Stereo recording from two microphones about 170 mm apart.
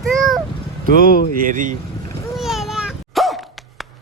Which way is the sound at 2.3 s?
Centre (ahead or behind).